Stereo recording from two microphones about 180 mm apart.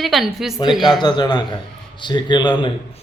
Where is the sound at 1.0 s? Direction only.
25° left (ahead or behind).